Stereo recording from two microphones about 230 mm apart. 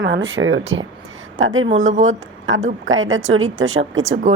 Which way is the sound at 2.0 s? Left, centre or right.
Right.